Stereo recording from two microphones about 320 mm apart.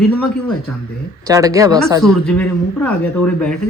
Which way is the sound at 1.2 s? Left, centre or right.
Centre.